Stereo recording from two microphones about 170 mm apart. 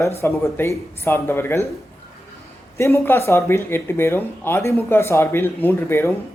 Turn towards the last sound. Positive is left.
turn(degrees=15)  # may be behind; listen again after turning